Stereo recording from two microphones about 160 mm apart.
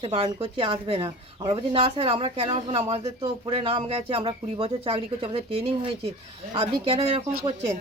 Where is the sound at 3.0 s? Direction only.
25° right (ahead or behind).